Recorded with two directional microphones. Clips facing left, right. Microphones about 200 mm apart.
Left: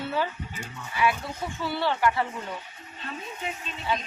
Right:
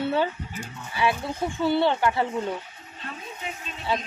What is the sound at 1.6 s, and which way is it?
Speech, 25° right (ahead or behind).